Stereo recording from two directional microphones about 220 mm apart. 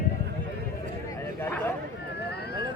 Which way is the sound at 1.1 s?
10° left (ahead or behind).